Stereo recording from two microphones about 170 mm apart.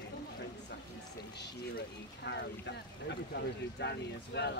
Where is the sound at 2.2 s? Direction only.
90° left.